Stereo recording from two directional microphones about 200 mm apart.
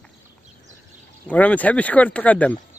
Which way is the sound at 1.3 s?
5° left (ahead or behind).